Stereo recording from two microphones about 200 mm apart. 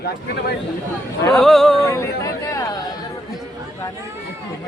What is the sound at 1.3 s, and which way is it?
Speech, centre (ahead or behind).